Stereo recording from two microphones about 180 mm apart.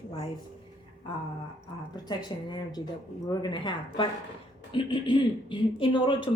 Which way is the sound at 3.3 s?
25° left (ahead or behind).